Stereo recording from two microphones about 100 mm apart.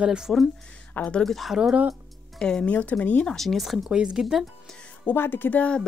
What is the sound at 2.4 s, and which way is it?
Speech, 5° left (ahead or behind).